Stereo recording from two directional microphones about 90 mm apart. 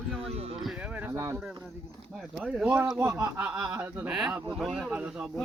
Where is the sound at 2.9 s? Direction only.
30° right (ahead or behind).